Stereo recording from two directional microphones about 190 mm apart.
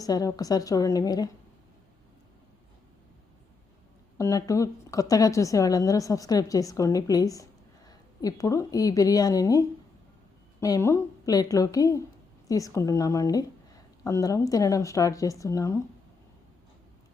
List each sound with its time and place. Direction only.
0.0 s a woman's voice: 20° left (ahead or behind)
4.2 s a woman's voice: 15° left (ahead or behind)